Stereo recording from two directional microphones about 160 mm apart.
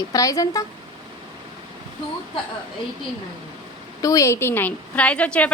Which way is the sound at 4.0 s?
20° left (ahead or behind).